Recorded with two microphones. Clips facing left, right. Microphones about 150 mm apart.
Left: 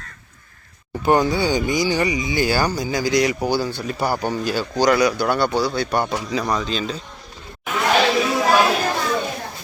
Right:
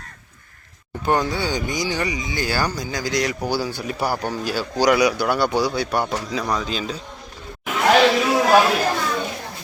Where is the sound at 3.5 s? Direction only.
10° right (ahead or behind).